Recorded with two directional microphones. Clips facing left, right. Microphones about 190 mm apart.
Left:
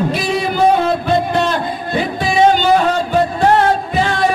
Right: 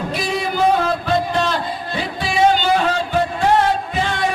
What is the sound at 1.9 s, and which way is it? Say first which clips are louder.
Music: left 6 dB; 45° left (ahead or behind).